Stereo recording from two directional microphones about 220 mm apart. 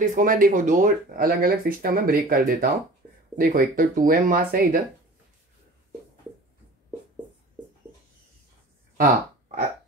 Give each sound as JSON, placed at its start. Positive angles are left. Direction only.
{"t": 0.0, "sound": "speech", "side_deg": -35}